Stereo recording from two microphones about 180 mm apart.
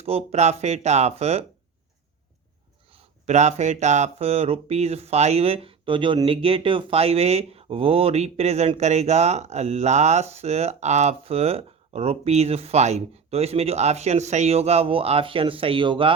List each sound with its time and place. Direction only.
0.0 s speech: 35° right (ahead or behind)
2.9 s speech: 40° right (ahead or behind)